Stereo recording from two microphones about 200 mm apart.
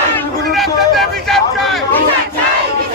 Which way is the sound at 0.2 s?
Centre (ahead or behind).